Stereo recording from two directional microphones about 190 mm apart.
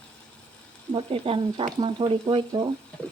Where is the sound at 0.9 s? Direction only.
30° right (ahead or behind).